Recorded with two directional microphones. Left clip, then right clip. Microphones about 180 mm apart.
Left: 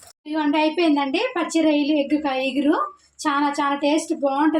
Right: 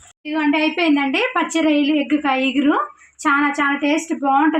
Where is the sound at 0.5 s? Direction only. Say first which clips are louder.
Even; 30° right (ahead or behind).